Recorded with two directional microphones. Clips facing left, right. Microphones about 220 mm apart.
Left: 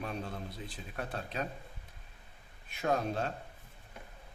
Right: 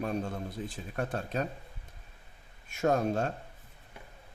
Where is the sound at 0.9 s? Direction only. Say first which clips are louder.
Right 5 dB; 45° right (ahead or behind).